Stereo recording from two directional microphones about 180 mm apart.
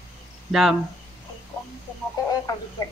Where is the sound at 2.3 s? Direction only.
20° left (ahead or behind).